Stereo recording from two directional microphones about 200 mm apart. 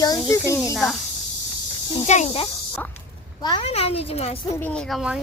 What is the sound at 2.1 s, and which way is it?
Speech, 30° left (ahead or behind).